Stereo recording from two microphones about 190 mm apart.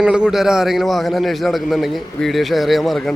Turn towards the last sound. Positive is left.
turn(degrees=0)  # may be behind; listen again after turning